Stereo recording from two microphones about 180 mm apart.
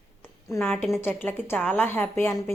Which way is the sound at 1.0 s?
10° left (ahead or behind).